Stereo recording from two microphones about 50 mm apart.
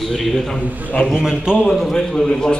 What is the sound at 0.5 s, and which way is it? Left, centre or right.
Speech, left.